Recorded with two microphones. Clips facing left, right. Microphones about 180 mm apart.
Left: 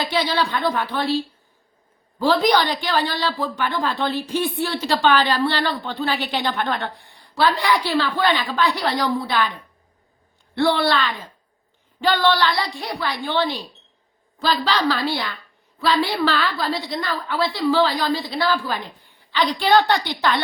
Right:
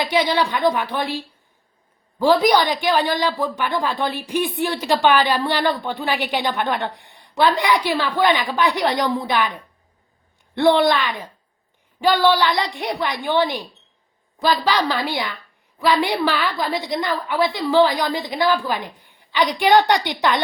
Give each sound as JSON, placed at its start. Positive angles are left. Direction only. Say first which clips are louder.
{"t": 0.0, "sound": "speech", "louder": "right 3 dB", "side_deg": -15}
{"t": 10.5, "sound": "speech", "louder": "right 3 dB", "side_deg": -20}